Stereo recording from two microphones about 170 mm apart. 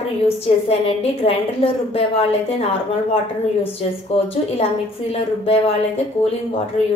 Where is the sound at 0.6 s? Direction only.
35° left (ahead or behind).